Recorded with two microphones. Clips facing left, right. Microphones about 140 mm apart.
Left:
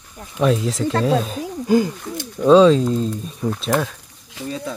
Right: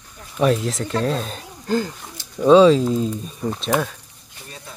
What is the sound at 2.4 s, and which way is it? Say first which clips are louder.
Speech: even; centre (ahead or behind).